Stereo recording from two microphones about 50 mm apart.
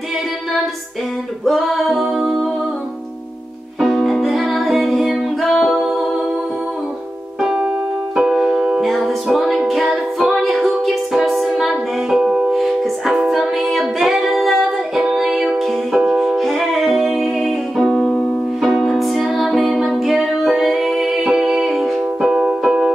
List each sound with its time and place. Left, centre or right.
1.4 s music: centre
3.8 s music: centre
7.4 s keyboard: centre
8.2 s music: centre
8.8 s music: centre
12.5 s music: centre
22.2 s music: centre